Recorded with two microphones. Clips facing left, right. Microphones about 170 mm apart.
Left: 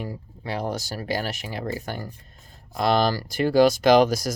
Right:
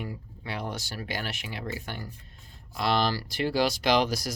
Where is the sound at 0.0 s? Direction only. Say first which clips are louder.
Left 4 dB; 35° left (ahead or behind).